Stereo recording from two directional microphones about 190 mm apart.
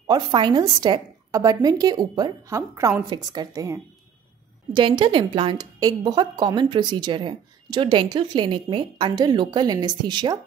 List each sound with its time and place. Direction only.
0.0 s a woman's voice: 25° right (ahead or behind)